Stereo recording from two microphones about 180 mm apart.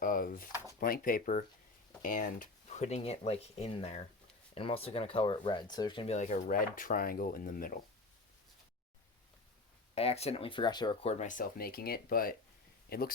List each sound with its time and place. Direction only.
0.0 s a sound: 50° left (ahead or behind)
0.8 s speech: 50° left (ahead or behind)
9.9 s speech: 35° left (ahead or behind); by 12.4 s 55° left (ahead or behind)